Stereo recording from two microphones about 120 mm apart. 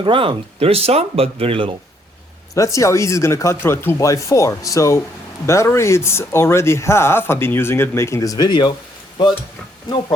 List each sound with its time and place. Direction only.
0.0 s speech: 45° right (ahead or behind)
2.7 s speech: 25° left (ahead or behind)